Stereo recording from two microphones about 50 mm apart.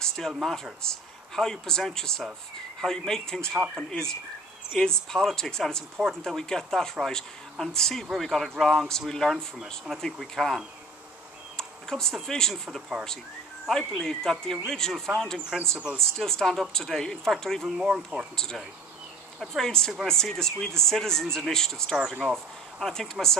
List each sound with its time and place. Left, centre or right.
0.0 s a sound: centre
0.3 s speech: centre
0.8 s speech: centre
13.7 s speech: centre
17.6 s speech: centre
18.3 s speech: centre